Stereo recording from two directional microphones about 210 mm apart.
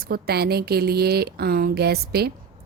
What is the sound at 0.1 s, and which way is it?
A woman's voice, 50° right (ahead or behind).